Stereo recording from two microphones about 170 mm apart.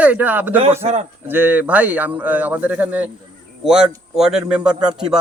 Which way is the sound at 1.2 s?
10° right (ahead or behind).